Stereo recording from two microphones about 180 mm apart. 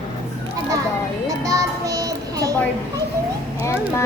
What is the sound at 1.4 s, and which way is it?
Child singing, 20° right (ahead or behind).